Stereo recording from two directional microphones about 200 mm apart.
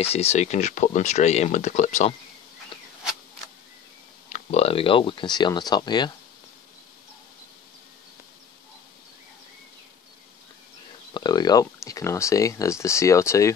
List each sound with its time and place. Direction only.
0.0 s speech: 30° left (ahead or behind)
4.3 s speech: 30° left (ahead or behind)
11.1 s speech: 20° left (ahead or behind)